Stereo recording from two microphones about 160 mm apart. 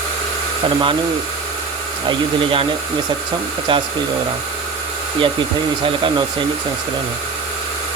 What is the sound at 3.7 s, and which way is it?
Speech, 30° right (ahead or behind).